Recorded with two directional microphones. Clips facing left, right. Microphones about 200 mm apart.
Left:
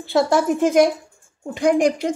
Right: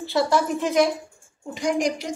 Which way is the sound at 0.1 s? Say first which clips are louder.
Left 4 dB; 50° left (ahead or behind).